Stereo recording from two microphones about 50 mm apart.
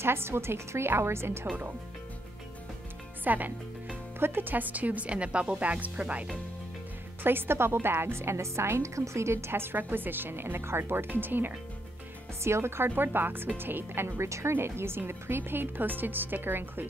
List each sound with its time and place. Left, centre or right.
0.0 s a woman's voice: right
3.3 s speech: right
4.2 s speech: right
7.2 s a woman's voice: right
11.1 s speech: right
12.4 s a woman's voice: right
14.2 s speech: right
14.5 s a woman's voice: right